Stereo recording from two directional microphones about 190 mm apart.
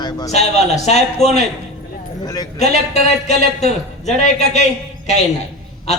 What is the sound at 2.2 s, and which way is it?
Speech, 20° left (ahead or behind).